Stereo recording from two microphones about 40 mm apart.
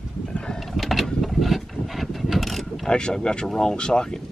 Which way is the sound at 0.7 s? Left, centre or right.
Centre.